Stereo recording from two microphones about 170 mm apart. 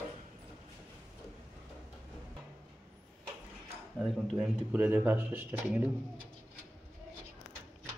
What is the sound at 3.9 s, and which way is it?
Speech, centre (ahead or behind).